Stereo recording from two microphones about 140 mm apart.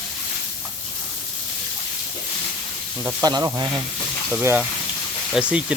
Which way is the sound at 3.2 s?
25° right (ahead or behind).